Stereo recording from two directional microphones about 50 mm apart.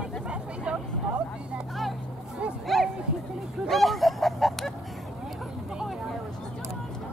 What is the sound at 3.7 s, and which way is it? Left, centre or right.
Goose, centre.